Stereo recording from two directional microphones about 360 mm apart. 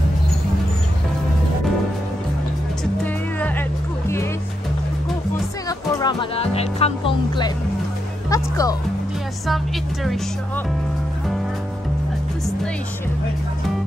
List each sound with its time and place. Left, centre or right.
3.3 s music: centre
5.7 s music: centre
8.3 s speech: centre